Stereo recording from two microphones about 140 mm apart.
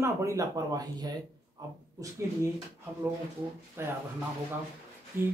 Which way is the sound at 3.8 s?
15° right (ahead or behind).